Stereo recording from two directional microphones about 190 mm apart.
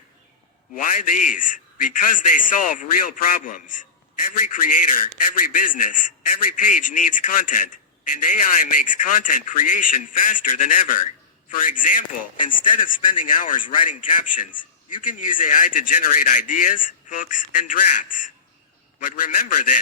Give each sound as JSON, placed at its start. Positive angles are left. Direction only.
{"t": 0.8, "sound": "a man's voice", "side_deg": 45}
{"t": 8.9, "sound": "a man's voice", "side_deg": 45}